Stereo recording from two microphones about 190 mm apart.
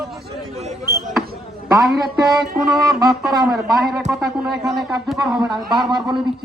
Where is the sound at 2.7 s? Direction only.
Centre (ahead or behind).